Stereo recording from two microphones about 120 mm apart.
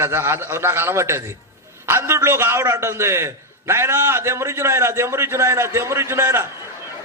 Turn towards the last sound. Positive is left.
turn(degrees=-25)  # may be behind; listen again after turning